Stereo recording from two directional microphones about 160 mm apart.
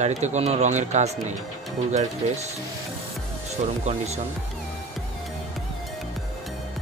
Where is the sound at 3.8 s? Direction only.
45° right (ahead or behind).